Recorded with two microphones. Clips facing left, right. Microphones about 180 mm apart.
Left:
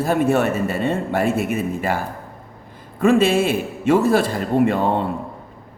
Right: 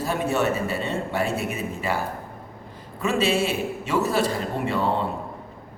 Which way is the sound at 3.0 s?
55° left (ahead or behind).